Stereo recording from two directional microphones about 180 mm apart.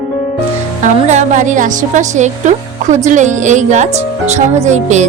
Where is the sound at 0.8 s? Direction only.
40° right (ahead or behind).